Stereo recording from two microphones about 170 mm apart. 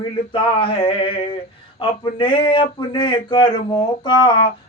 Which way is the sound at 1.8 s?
30° left (ahead or behind).